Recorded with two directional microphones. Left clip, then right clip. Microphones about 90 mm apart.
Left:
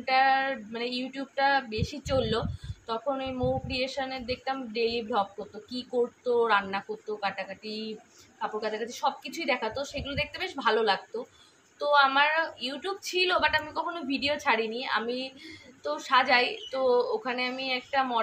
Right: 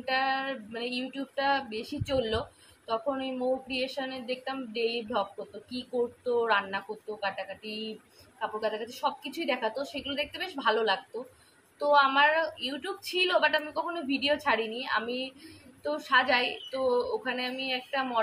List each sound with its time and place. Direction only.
0.0 s a woman's voice: 35° left (ahead or behind)